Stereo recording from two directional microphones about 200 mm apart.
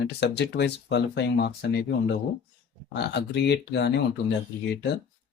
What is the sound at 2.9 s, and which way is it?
Speech, 60° left (ahead or behind).